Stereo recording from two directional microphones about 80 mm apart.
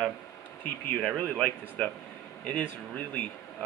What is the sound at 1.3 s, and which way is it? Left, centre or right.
Speech, centre.